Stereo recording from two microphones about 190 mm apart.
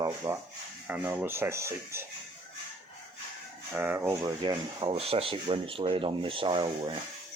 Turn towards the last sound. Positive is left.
turn(degrees=-25)  # may be behind; listen again after turning